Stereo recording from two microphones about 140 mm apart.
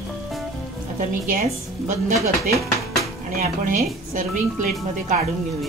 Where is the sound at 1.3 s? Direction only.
75° right (ahead or behind).